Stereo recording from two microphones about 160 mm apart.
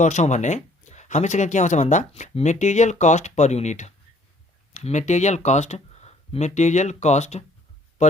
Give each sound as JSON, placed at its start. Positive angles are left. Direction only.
{"t": 0.0, "sound": "speech", "side_deg": 45}